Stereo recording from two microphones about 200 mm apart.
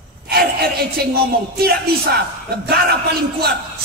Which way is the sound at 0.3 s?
50° right (ahead or behind).